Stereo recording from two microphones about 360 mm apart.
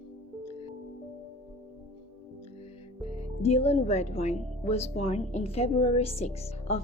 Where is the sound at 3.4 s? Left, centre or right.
Centre.